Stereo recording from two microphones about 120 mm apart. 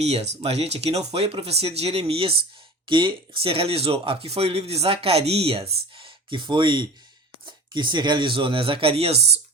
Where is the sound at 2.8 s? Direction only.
40° right (ahead or behind).